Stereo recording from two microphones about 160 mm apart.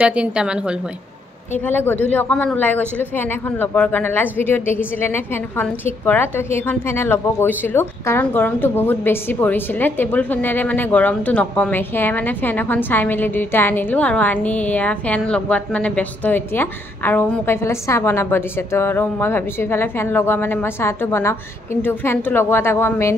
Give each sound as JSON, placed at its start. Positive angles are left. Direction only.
{"t": 0.0, "sound": "a woman's voice", "side_deg": -5}
{"t": 1.7, "sound": "a woman's voice", "side_deg": 10}